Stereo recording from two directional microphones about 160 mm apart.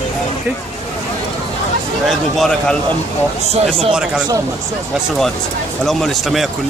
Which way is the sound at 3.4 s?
40° right (ahead or behind).